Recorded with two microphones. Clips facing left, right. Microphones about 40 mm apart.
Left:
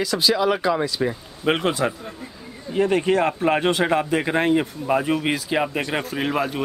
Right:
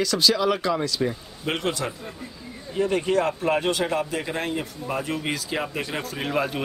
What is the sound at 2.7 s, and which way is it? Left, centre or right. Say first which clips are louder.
A man's voice: left 3 dB; left.